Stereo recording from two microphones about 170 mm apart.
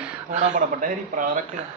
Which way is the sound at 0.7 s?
50° right (ahead or behind).